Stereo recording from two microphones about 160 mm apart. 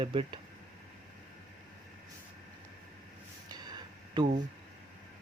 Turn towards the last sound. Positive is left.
turn(degrees=-25)  # may be behind; listen again after turning